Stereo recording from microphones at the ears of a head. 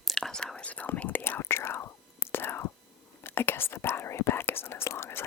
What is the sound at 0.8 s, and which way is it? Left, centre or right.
Whispering, left.